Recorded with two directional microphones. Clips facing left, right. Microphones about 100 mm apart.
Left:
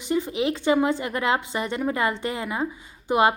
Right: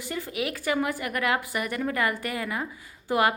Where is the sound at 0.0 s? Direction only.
20° left (ahead or behind).